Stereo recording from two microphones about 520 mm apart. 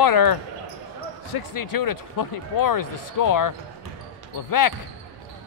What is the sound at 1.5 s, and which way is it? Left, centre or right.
Speech, left.